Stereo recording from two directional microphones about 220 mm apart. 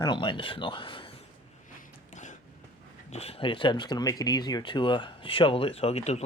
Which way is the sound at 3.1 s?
30° left (ahead or behind).